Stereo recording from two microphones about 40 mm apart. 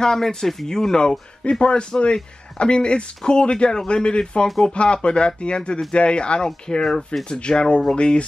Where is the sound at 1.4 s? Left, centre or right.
Left.